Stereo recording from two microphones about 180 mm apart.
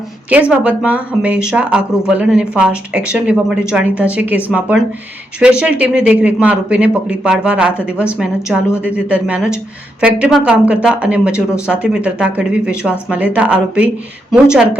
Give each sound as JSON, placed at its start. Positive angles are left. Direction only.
{"t": 0.3, "sound": "speech", "side_deg": -5}